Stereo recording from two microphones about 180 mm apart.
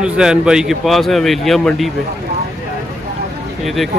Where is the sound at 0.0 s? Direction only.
5° right (ahead or behind).